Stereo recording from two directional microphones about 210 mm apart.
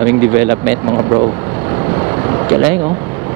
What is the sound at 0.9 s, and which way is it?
Speech, 25° right (ahead or behind).